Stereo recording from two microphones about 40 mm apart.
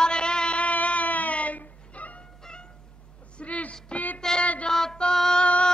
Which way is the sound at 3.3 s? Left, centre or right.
Left.